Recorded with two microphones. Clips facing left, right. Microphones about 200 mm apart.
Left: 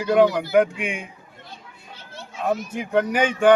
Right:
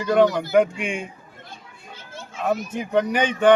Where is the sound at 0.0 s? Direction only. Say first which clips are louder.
Left 1 dB; 10° left (ahead or behind).